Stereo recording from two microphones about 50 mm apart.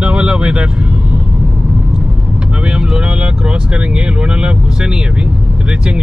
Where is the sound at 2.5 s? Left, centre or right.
Centre.